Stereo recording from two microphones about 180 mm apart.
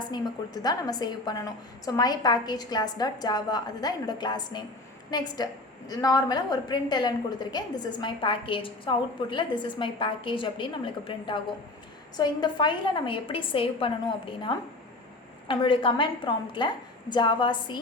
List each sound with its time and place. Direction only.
0.0 s a woman's voice: 25° left (ahead or behind)